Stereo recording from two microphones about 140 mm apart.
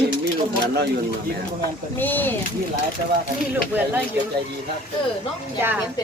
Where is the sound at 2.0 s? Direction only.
15° left (ahead or behind).